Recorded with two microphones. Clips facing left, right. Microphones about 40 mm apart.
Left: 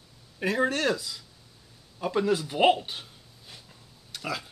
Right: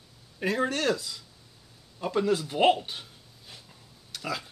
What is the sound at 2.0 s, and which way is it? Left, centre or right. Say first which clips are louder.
Speech: even; centre.